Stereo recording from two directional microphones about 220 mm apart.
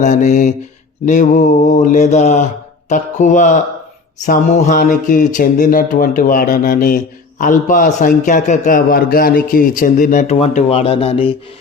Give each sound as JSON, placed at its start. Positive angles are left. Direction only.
{"t": 0.0, "sound": "speech", "side_deg": 35}